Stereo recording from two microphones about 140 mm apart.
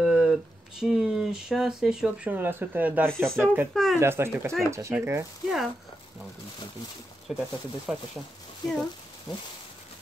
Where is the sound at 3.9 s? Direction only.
20° right (ahead or behind).